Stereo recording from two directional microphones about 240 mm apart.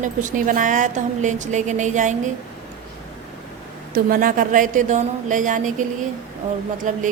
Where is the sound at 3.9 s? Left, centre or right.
Right.